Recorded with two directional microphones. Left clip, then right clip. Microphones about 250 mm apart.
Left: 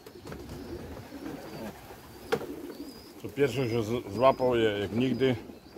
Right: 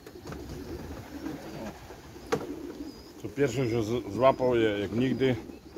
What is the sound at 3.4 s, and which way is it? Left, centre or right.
Speech, centre.